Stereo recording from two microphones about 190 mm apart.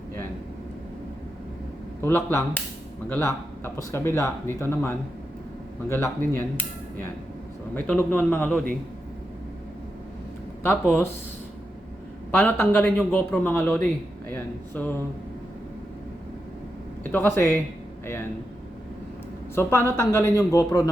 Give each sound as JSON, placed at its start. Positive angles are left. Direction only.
{"t": 2.0, "sound": "speech", "side_deg": 10}
{"t": 7.8, "sound": "speech", "side_deg": 10}
{"t": 10.6, "sound": "speech", "side_deg": 10}
{"t": 12.3, "sound": "speech", "side_deg": 10}
{"t": 17.0, "sound": "speech", "side_deg": 10}
{"t": 19.5, "sound": "speech", "side_deg": 15}